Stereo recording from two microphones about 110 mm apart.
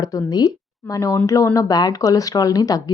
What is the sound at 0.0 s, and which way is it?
A woman's voice, 35° left (ahead or behind).